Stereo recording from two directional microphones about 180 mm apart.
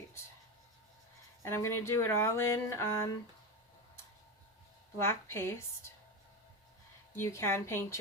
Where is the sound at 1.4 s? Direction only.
15° left (ahead or behind).